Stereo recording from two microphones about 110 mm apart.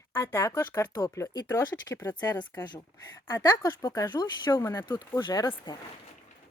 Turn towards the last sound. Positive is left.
turn(degrees=40)  # may be behind; listen again after turning